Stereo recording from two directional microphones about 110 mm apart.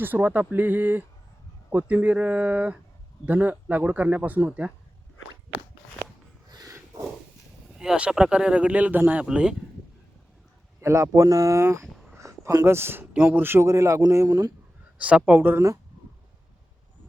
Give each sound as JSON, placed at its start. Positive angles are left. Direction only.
{"t": 0.0, "sound": "speech", "side_deg": -15}
{"t": 6.5, "sound": "a sound", "side_deg": -35}
{"t": 7.7, "sound": "speech", "side_deg": -5}
{"t": 10.8, "sound": "speech", "side_deg": -25}
{"t": 12.1, "sound": "a sound", "side_deg": -25}
{"t": 13.1, "sound": "speech", "side_deg": -15}
{"t": 14.9, "sound": "speech", "side_deg": -10}